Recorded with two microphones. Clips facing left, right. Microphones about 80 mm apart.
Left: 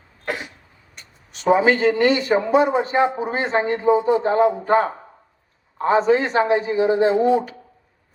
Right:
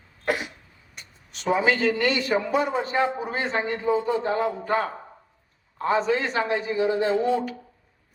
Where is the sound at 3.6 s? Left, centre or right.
Left.